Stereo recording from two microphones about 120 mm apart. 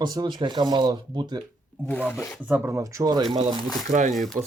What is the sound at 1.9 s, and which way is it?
Speech, 10° left (ahead or behind).